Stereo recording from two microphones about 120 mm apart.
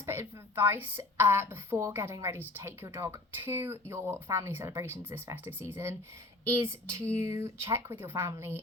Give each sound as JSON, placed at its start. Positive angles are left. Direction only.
{"t": 0.0, "sound": "speech", "side_deg": -20}